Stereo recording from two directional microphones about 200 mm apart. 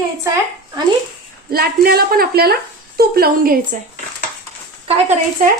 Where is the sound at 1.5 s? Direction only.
50° right (ahead or behind).